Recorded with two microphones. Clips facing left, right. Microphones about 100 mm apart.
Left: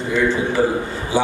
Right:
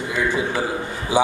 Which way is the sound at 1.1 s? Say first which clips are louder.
Right 1 dB; 15° right (ahead or behind).